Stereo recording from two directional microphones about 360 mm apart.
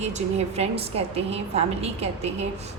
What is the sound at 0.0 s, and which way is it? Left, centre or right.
A woman's voice, centre.